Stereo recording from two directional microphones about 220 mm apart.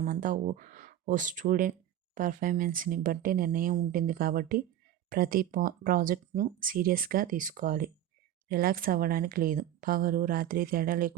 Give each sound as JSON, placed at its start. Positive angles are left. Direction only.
{"t": 0.0, "sound": "speech", "side_deg": -40}